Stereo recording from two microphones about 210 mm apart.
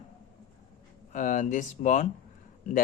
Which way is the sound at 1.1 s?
40° left (ahead or behind).